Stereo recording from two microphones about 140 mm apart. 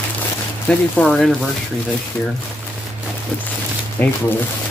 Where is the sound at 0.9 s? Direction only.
5° left (ahead or behind).